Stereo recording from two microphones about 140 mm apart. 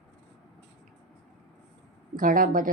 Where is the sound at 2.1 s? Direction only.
80° right.